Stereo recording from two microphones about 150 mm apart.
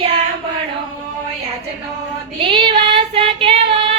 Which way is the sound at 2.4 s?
35° right (ahead or behind).